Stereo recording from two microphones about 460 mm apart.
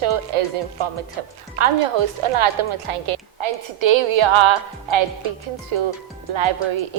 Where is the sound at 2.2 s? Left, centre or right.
Right.